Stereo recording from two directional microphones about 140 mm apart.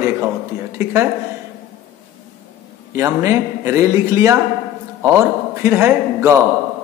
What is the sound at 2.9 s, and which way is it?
A man's voice, 20° right (ahead or behind).